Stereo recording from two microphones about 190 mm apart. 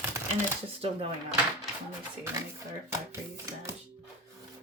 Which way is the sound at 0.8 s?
30° right (ahead or behind).